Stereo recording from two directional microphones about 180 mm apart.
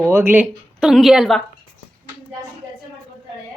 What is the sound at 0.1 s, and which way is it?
Speech, 10° right (ahead or behind).